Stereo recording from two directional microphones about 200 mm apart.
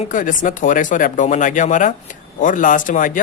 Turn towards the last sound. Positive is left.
turn(degrees=40)  # may be behind; listen again after turning